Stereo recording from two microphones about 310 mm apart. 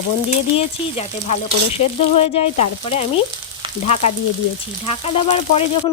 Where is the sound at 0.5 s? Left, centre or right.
Left.